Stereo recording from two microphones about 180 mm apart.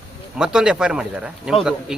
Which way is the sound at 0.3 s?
5° right (ahead or behind).